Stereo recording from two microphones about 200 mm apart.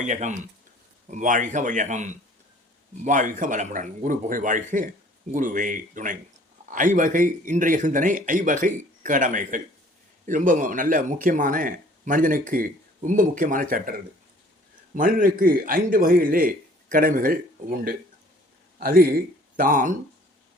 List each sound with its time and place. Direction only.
0.0 s speech: 35° right (ahead or behind)
14.9 s speech: 45° right (ahead or behind)